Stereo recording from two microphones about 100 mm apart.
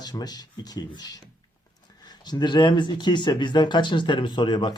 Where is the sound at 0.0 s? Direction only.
45° left (ahead or behind).